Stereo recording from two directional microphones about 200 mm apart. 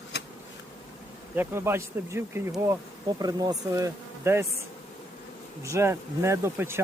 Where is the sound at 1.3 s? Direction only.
10° right (ahead or behind).